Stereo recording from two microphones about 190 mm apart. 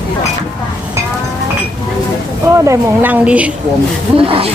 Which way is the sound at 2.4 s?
15° right (ahead or behind).